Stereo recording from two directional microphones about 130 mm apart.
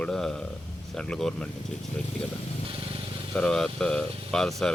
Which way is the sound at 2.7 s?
45° right (ahead or behind).